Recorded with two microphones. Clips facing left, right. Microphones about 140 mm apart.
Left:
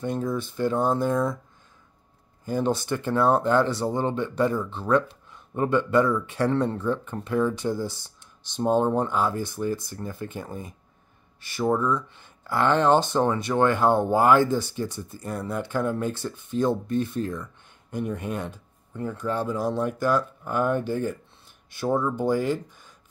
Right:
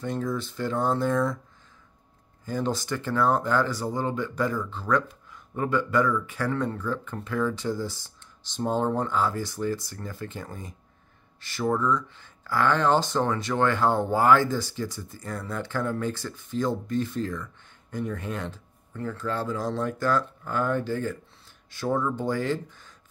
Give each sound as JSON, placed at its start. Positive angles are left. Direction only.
{"t": 0.0, "sound": "speech", "side_deg": 20}
{"t": 2.4, "sound": "speech", "side_deg": 20}